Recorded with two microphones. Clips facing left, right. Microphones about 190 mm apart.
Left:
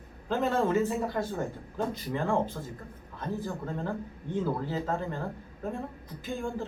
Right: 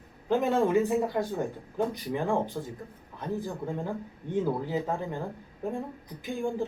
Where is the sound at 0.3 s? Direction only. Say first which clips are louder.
Right 2 dB; 15° right (ahead or behind).